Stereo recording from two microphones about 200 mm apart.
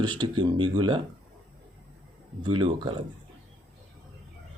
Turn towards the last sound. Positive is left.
turn(degrees=-25)  # may be behind; listen again after turning